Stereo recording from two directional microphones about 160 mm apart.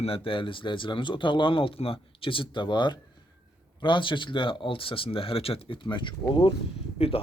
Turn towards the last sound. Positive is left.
turn(degrees=40)  # may be behind; listen again after turning